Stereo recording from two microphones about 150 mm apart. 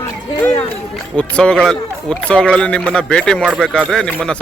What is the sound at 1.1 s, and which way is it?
A man's voice, 5° left (ahead or behind).